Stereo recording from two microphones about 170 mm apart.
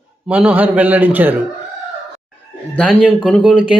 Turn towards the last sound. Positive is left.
turn(degrees=-5)  # may be behind; listen again after turning